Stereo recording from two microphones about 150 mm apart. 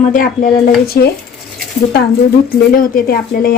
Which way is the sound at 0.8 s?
90° left.